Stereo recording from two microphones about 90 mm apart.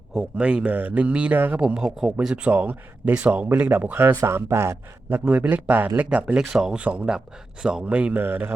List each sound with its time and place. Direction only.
0.1 s a man's voice: 15° right (ahead or behind); by 4.8 s 30° right (ahead or behind)
5.0 s a man's voice: 15° right (ahead or behind)